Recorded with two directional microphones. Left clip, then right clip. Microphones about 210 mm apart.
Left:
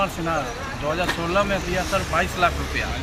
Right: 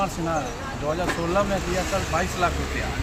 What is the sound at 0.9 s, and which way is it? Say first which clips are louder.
A man's voice: left 2 dB; 5° right (ahead or behind).